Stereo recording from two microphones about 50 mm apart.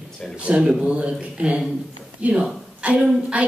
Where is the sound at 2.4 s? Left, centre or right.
Right.